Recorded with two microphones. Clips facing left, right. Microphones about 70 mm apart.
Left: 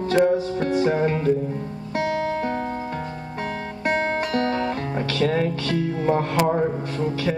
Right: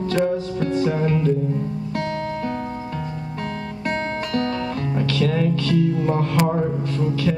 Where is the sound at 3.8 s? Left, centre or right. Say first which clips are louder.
Left 3 dB; centre.